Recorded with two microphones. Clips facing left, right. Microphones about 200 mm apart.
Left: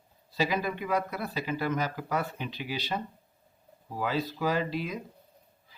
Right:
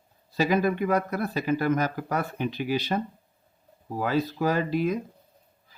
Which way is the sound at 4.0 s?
50° right (ahead or behind).